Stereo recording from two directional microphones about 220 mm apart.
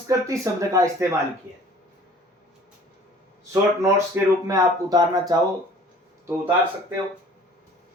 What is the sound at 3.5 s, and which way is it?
Speech, 15° right (ahead or behind).